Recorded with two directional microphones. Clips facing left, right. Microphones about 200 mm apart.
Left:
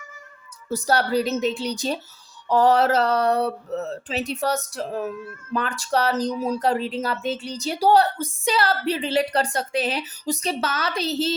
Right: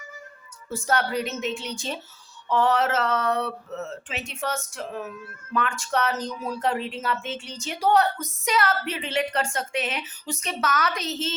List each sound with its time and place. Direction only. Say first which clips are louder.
0.7 s speech: left 4 dB; 35° left (ahead or behind)